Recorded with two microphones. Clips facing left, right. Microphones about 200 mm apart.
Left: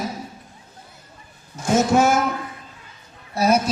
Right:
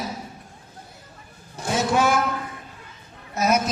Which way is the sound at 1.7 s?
45° left (ahead or behind).